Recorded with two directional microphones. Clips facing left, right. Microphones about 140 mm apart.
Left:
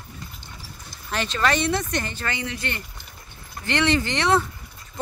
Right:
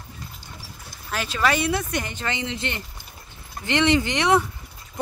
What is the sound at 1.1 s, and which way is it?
Speech, 5° right (ahead or behind).